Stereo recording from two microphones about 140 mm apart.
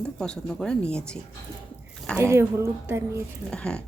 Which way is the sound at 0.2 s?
5° left (ahead or behind).